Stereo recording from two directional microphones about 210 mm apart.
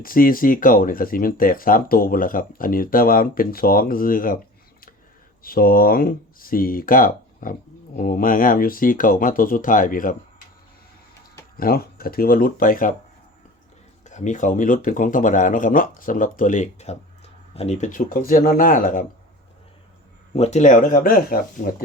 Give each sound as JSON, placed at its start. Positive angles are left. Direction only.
{"t": 0.0, "sound": "speech", "side_deg": 40}
{"t": 5.4, "sound": "speech", "side_deg": 45}
{"t": 11.5, "sound": "speech", "side_deg": 45}
{"t": 14.0, "sound": "speech", "side_deg": 35}
{"t": 20.3, "sound": "speech", "side_deg": 30}